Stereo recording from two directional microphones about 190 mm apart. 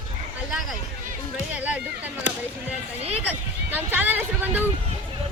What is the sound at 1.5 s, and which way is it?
Chatter, 10° right (ahead or behind).